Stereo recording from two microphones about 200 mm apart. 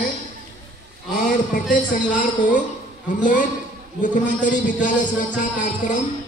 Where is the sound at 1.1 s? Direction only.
40° left (ahead or behind).